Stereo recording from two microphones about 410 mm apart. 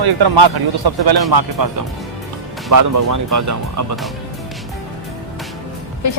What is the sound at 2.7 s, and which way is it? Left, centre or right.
Speech, right.